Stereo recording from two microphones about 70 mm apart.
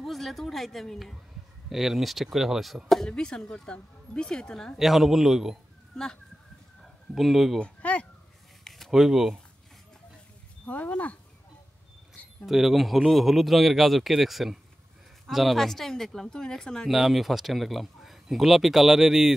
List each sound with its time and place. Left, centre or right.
0.0 s a woman's voice: centre
3.1 s a woman's voice: centre
4.7 s speech: centre
6.8 s speech: centre
7.6 s speech: centre
8.6 s a sound: centre
8.9 s speech: centre
10.6 s speech: left
12.4 s speech: centre
16.9 s speech: centre